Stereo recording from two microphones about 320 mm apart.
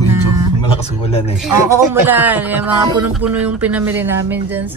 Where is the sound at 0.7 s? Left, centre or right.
Centre.